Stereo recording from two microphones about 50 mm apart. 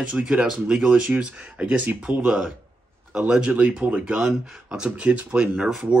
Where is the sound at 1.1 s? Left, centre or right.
Right.